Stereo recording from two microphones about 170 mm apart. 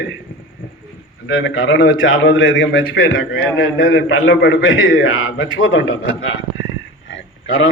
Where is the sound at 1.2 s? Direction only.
90° left.